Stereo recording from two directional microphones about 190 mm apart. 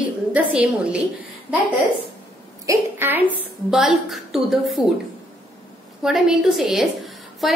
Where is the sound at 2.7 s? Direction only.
10° right (ahead or behind).